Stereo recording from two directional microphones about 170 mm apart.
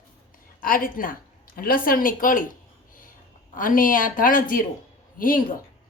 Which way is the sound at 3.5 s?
55° left (ahead or behind).